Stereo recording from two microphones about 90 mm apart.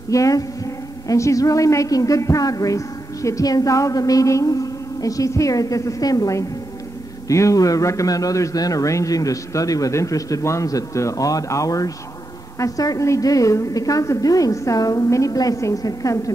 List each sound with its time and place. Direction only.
0.1 s a man's voice: 40° left (ahead or behind)